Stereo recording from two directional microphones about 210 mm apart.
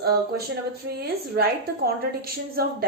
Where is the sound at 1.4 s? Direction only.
50° right (ahead or behind).